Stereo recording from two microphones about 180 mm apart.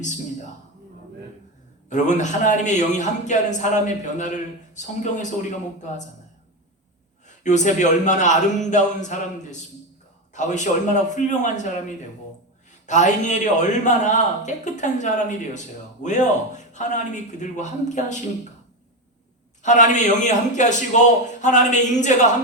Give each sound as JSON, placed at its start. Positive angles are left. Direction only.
{"t": 1.9, "sound": "a man's voice", "side_deg": 45}
{"t": 7.4, "sound": "a man's voice", "side_deg": 40}
{"t": 19.6, "sound": "a man's voice", "side_deg": 40}